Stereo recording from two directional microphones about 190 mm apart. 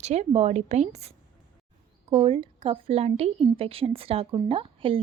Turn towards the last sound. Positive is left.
turn(degrees=-30)  # may be behind; listen again after turning